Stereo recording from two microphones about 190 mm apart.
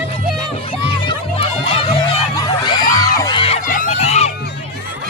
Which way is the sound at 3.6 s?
45° left (ahead or behind).